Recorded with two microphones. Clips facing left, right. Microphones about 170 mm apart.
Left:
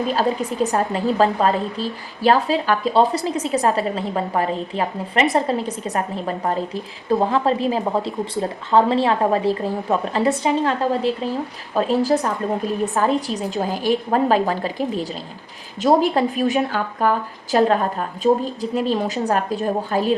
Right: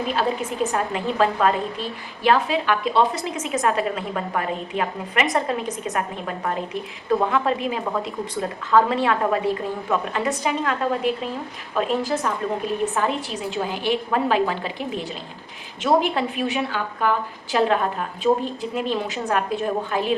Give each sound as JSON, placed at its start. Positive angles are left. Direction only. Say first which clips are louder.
{"t": 0.1, "sound": "a woman's voice", "louder": "left 3 dB", "side_deg": 35}